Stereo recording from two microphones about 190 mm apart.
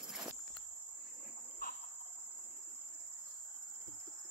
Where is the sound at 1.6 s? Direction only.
45° left (ahead or behind).